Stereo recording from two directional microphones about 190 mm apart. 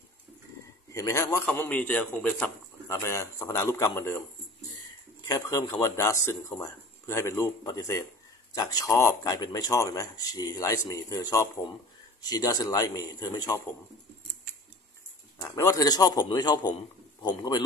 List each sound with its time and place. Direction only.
0.9 s a man's voice: 15° left (ahead or behind)
5.2 s a man's voice: 15° left (ahead or behind)
15.4 s a man's voice: 15° left (ahead or behind)